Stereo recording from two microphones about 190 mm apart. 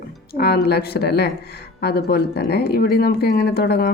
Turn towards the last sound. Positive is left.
turn(degrees=55)  # may be behind; listen again after turning